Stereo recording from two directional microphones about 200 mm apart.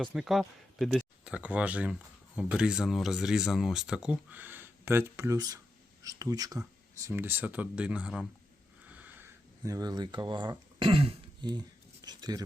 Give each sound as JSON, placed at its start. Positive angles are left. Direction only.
{"t": 0.0, "sound": "speech", "side_deg": 0}
{"t": 8.9, "sound": "a sound", "side_deg": -10}
{"t": 12.0, "sound": "speech", "side_deg": -20}